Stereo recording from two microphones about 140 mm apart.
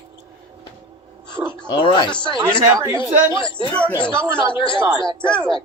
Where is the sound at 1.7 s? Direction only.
35° left (ahead or behind).